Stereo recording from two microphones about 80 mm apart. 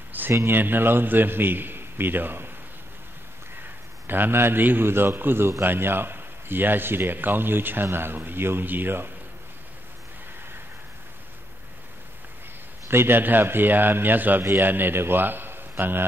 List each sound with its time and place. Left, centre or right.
0.3 s speech: right
0.6 s a man's voice: right
4.1 s a man's voice: right
12.8 s a man's voice: right